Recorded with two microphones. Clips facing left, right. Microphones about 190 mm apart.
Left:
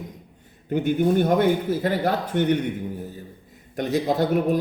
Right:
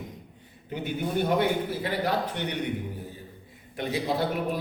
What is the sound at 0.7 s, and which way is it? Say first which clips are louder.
A man's voice: left 9 dB; 50° left (ahead or behind).